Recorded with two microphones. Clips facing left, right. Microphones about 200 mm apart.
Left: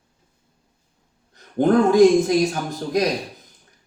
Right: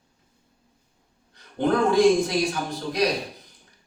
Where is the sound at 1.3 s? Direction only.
45° left (ahead or behind).